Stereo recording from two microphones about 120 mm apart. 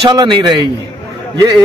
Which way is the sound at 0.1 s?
35° right (ahead or behind).